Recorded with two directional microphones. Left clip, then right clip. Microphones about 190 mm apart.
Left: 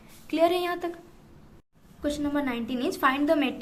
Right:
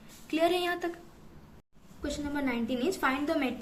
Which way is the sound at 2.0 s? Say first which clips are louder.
Left 5 dB; 25° left (ahead or behind).